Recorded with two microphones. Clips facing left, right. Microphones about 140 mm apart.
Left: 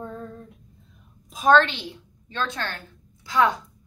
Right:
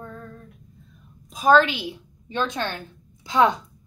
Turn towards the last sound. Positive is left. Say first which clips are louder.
# right 2 dB
turn(degrees=-20)  # may be behind; listen again after turning